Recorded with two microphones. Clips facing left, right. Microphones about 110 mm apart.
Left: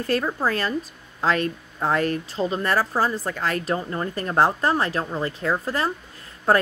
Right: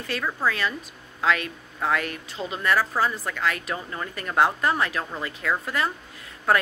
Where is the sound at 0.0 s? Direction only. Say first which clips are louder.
Left 4 dB; 40° left (ahead or behind).